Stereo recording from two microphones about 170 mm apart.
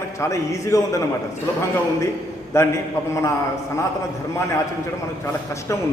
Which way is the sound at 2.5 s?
15° left (ahead or behind).